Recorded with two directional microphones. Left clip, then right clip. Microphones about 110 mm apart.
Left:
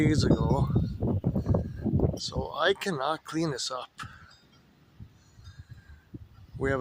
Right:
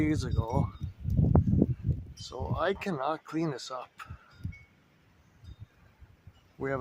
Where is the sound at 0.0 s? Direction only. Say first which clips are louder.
Left 6 dB; 35° left (ahead or behind).